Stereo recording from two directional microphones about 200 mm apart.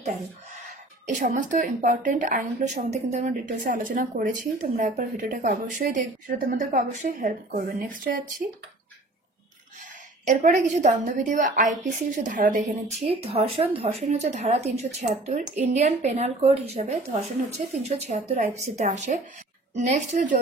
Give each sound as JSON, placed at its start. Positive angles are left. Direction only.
{"t": 1.0, "sound": "a woman's voice", "side_deg": -40}
{"t": 10.2, "sound": "a woman's voice", "side_deg": -35}